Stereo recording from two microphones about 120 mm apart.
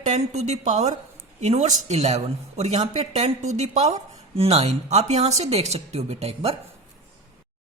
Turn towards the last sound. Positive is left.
turn(degrees=-60)  # may be behind; listen again after turning